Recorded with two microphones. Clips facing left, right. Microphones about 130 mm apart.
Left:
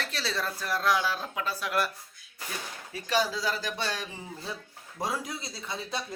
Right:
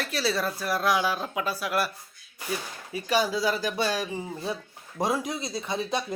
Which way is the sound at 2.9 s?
10° right (ahead or behind).